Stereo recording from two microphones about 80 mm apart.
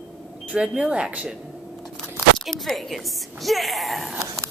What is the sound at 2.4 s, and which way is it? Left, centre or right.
Speech, centre.